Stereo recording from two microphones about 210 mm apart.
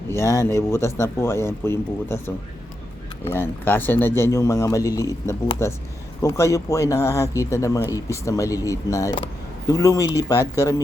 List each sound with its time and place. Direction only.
0.1 s speech: 15° left (ahead or behind)
3.3 s speech: 10° left (ahead or behind)